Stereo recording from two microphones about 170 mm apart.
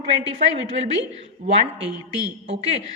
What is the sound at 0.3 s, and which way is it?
Speech, 35° right (ahead or behind).